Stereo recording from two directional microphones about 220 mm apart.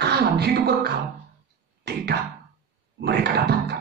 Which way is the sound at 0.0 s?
50° right (ahead or behind).